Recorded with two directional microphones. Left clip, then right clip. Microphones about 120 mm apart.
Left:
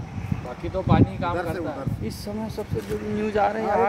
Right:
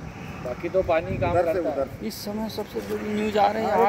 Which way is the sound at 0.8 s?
45° left (ahead or behind).